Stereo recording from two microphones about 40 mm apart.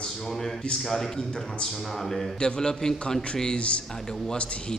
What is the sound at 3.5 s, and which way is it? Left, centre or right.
Speech, left.